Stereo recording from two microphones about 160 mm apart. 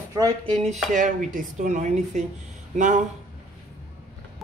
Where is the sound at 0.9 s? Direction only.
55° right (ahead or behind).